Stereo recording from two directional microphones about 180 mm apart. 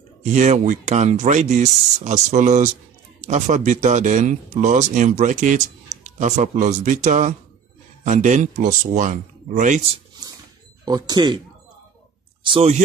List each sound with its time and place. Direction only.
0.2 s speech: 40° right (ahead or behind)
10.9 s speech: 25° right (ahead or behind)
12.4 s speech: 35° right (ahead or behind)